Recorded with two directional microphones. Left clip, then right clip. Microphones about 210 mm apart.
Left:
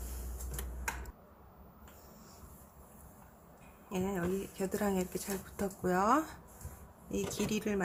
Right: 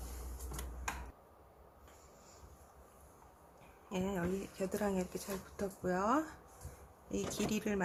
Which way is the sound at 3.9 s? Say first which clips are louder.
Left 3 dB; centre (ahead or behind).